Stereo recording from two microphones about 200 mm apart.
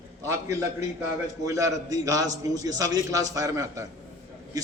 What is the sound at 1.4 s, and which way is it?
A man's voice, 15° right (ahead or behind).